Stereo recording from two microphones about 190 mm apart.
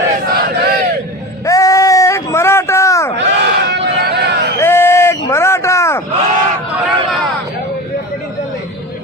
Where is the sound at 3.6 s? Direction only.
60° right (ahead or behind).